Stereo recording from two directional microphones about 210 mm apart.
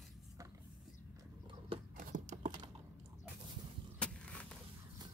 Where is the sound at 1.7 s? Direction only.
35° right (ahead or behind).